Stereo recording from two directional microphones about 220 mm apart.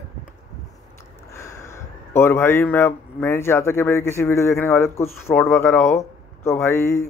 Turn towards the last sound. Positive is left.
turn(degrees=10)  # may be behind; listen again after turning